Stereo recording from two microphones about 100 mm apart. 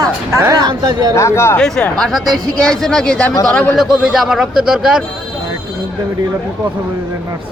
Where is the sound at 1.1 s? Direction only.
30° left (ahead or behind).